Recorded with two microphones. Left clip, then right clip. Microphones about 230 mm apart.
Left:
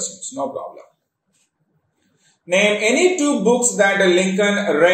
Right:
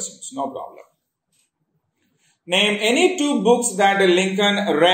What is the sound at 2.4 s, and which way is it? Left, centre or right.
A man's voice, right.